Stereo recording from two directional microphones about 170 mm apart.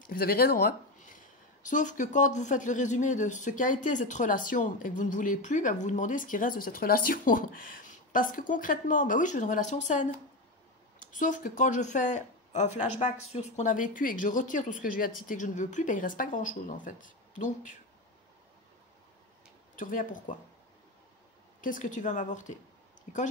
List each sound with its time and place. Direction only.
0.0 s speech: 60° left (ahead or behind)
0.9 s speech: 50° left (ahead or behind)
19.7 s speech: 50° left (ahead or behind)
21.5 s speech: 50° left (ahead or behind)